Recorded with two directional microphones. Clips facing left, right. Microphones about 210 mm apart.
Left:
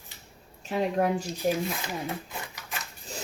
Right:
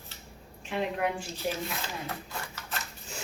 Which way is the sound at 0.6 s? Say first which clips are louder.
Left 4 dB; 40° left (ahead or behind).